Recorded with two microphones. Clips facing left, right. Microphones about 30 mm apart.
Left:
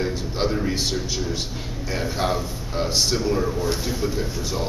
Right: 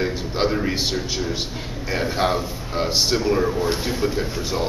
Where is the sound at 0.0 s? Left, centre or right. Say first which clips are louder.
Right 2 dB; centre.